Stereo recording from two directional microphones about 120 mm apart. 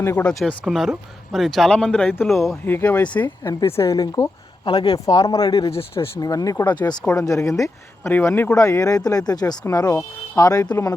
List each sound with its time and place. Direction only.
0.0 s speech: 20° left (ahead or behind)
0.6 s speech: centre (ahead or behind)
2.2 s speech: centre (ahead or behind)
2.6 s speech: 15° left (ahead or behind)
3.9 s speech: 35° left (ahead or behind)
5.0 s speech: 30° left (ahead or behind)
8.5 s speech: 30° left (ahead or behind)